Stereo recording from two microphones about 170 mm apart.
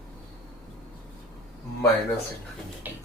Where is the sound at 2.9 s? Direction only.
10° right (ahead or behind).